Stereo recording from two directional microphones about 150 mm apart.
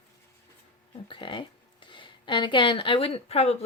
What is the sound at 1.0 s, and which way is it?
Speech, 35° left (ahead or behind).